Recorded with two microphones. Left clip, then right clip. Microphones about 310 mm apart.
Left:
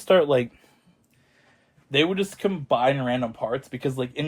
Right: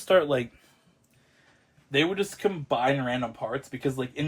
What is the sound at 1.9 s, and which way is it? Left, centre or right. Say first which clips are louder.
Speech: left 3 dB; left.